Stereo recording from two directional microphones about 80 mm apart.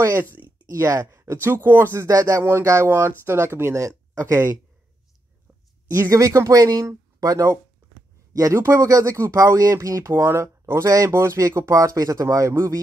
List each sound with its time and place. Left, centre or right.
0.0 s speech: right
0.8 s speech: right
2.0 s speech: right
2.4 s speech: right
5.9 s speech: right